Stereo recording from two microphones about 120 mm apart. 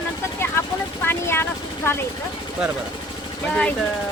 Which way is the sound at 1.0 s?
20° left (ahead or behind).